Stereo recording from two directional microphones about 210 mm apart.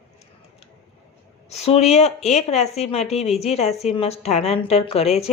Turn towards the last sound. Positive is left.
turn(degrees=30)  # may be behind; listen again after turning